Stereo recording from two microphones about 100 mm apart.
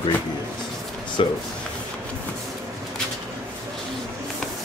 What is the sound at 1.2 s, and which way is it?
Speech, 65° left (ahead or behind).